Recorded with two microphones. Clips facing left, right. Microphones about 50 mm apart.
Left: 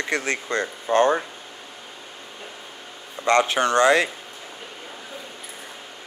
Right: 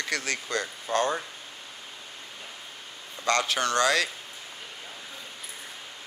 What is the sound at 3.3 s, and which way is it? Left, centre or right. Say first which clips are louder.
Speech: left 6 dB; left.